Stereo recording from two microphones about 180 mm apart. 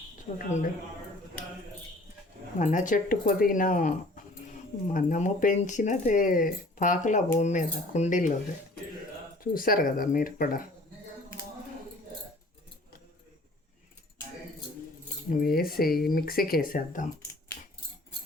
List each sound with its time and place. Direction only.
0.3 s speech: 45° left (ahead or behind)
2.6 s speech: 45° left (ahead or behind)
9.4 s speech: 50° left (ahead or behind)
15.3 s speech: 55° left (ahead or behind)